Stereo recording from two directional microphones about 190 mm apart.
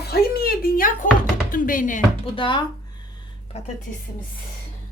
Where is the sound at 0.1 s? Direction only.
55° left (ahead or behind).